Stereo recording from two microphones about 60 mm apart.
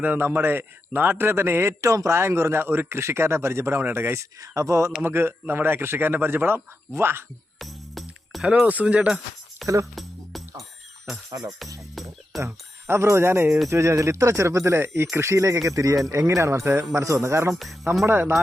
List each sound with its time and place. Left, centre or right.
0.2 s speech: right
4.2 s speech: right
5.0 s speech: right
7.6 s music: centre
8.6 s speech: right
9.9 s music: centre
11.3 s speech: right
12.0 s speech: centre
12.4 s speech: right
13.7 s speech: right
15.6 s speech: right